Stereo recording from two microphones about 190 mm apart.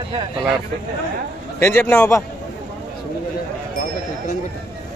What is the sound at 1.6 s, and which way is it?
Speech, 15° left (ahead or behind).